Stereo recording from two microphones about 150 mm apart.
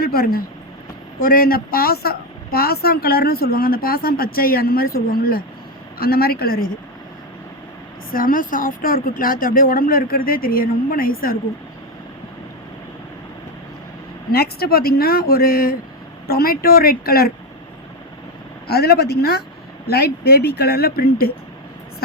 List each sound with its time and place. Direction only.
0.0 s a woman's voice: 85° left
6.0 s a woman's voice: 90° left
8.1 s a woman's voice: 65° left (ahead or behind)
14.3 s a woman's voice: 90° left
16.2 s a woman's voice: 90° left
18.7 s a woman's voice: 90° left